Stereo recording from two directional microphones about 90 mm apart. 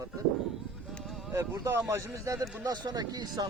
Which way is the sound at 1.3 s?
30° right (ahead or behind).